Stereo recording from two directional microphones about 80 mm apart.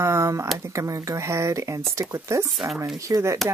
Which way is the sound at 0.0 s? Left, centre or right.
Right.